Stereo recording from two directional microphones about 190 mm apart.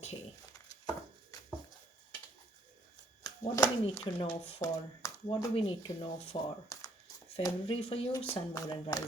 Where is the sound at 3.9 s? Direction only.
30° left (ahead or behind).